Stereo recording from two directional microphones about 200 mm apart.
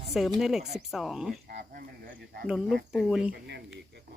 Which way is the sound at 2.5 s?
Centre (ahead or behind).